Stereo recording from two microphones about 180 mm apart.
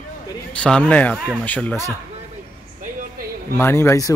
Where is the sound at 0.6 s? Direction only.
5° left (ahead or behind).